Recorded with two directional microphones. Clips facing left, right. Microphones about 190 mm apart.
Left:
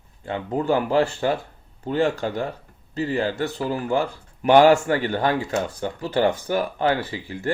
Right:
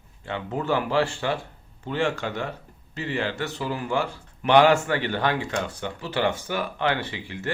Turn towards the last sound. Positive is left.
turn(degrees=40)  # may be behind; listen again after turning